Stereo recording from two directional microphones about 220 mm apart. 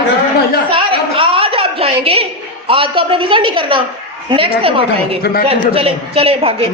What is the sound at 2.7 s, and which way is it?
A woman's voice, 25° right (ahead or behind).